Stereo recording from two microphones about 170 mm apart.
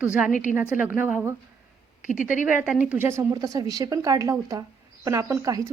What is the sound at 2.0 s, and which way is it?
Speech, 50° left (ahead or behind).